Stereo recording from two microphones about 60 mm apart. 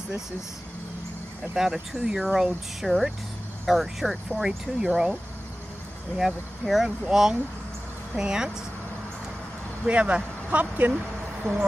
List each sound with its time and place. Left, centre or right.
1.5 s speech: centre
6.1 s speech: centre
9.8 s speech: right